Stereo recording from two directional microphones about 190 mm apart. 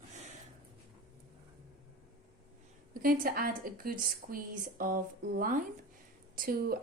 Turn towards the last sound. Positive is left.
turn(degrees=-50)  # may be behind; listen again after turning